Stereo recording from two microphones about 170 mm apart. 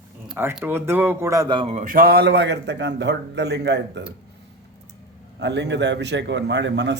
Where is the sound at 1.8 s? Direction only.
55° right (ahead or behind); by 4.0 s 90° right.